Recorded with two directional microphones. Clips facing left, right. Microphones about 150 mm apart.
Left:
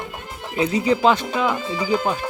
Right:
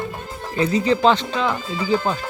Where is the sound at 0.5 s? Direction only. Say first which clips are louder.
Right 1 dB; 10° left (ahead or behind).